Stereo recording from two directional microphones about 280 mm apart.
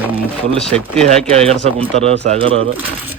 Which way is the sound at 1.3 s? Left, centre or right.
Right.